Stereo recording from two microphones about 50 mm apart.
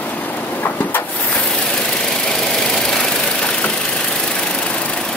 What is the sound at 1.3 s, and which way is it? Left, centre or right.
Engine, centre.